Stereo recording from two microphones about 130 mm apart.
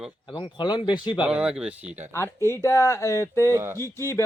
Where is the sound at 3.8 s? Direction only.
20° left (ahead or behind).